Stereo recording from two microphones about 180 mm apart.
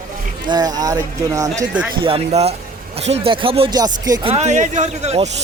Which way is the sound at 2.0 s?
30° right (ahead or behind).